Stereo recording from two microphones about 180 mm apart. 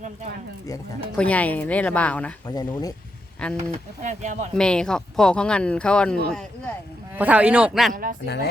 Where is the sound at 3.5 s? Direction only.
40° right (ahead or behind).